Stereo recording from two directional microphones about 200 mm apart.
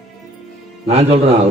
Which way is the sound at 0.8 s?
30° right (ahead or behind).